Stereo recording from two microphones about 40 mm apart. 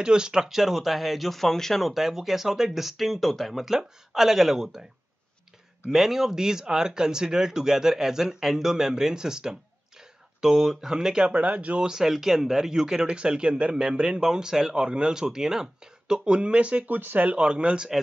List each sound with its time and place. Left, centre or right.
0.0 s speech: right
0.5 s speech: centre
1.9 s speech: centre
3.6 s speech: centre
5.9 s speech: centre
11.2 s speech: right
11.8 s speech: centre
13.0 s speech: right
16.3 s speech: right
16.8 s speech: right
17.4 s speech: right